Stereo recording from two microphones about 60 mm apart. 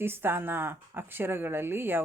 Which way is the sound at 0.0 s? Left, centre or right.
Right.